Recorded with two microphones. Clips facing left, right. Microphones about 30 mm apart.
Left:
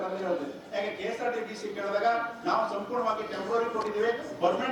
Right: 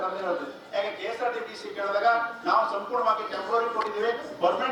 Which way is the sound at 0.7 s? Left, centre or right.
Right.